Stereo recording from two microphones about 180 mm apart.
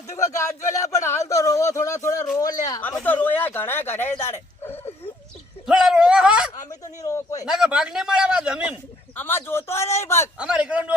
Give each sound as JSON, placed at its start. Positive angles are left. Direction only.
{"t": 1.0, "sound": "a man's voice", "side_deg": 15}
{"t": 5.6, "sound": "a man's voice", "side_deg": -5}
{"t": 6.7, "sound": "a man's voice", "side_deg": 20}
{"t": 7.4, "sound": "speech", "side_deg": -5}
{"t": 9.1, "sound": "speech", "side_deg": 10}
{"t": 10.3, "sound": "speech", "side_deg": -5}